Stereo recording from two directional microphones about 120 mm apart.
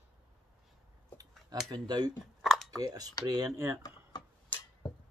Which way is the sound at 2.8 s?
35° right (ahead or behind).